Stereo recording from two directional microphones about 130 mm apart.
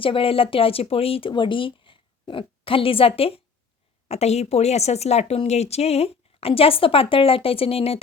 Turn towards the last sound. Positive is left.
turn(degrees=50)  # may be behind; listen again after turning